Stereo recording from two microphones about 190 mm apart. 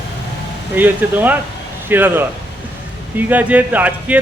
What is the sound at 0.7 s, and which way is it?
A man's voice, 10° right (ahead or behind).